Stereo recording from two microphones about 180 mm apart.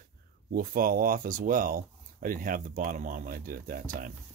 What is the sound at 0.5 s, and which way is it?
Speech, 50° right (ahead or behind).